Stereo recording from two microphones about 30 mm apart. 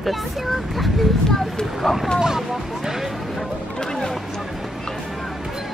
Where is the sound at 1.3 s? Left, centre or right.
Centre.